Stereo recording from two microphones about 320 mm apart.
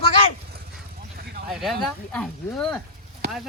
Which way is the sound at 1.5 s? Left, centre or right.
Centre.